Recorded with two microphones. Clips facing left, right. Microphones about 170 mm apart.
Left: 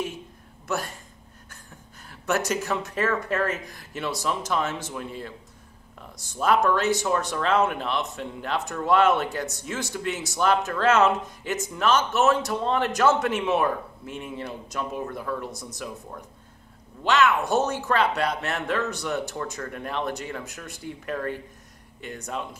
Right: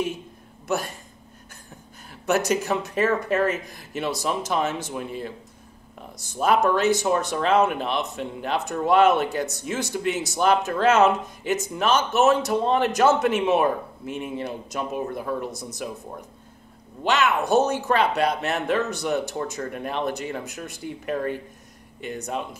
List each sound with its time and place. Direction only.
2.0 s speech: 20° right (ahead or behind)